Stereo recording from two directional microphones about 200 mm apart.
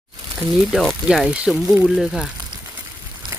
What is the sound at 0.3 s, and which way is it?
Speech, centre (ahead or behind).